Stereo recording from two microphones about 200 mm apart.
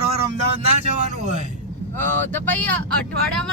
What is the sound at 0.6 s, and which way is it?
Speech, 35° right (ahead or behind).